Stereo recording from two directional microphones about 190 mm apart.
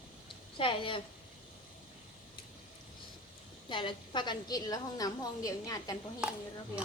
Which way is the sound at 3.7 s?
25° left (ahead or behind).